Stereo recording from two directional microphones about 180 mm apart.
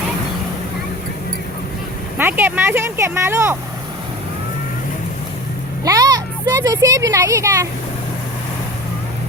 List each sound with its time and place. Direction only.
2.1 s speech: 10° right (ahead or behind)
5.8 s a woman's voice: 20° right (ahead or behind)